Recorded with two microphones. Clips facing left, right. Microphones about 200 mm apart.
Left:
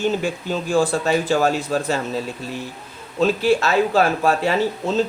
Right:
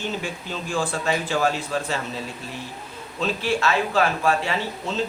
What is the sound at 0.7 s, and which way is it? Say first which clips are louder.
Speech: left 6 dB; 40° left (ahead or behind).